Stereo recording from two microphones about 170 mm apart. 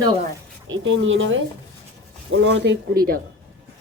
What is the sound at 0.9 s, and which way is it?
Speech, 90° right.